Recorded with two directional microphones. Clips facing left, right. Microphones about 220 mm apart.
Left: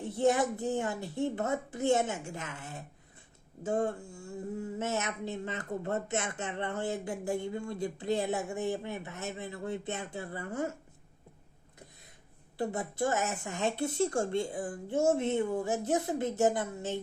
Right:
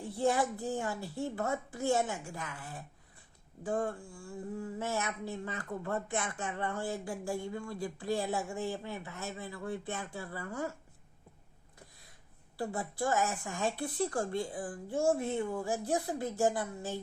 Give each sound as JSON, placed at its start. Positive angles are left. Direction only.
{"t": 0.0, "sound": "speech", "side_deg": 20}
{"t": 12.7, "sound": "speech", "side_deg": 20}